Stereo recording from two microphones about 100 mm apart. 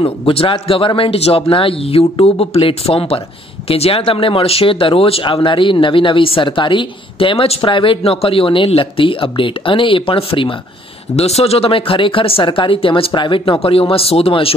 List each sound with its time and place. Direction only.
0.3 s speech: 65° left (ahead or behind)
3.6 s speech: 80° left; by 10.5 s 65° left (ahead or behind)
11.1 s speech: 90° left; by 14.5 s 70° left (ahead or behind)